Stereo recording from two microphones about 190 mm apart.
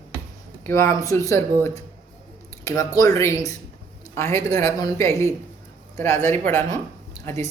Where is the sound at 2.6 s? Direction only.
20° left (ahead or behind).